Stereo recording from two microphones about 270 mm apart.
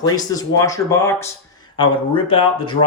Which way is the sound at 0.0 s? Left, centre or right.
Centre.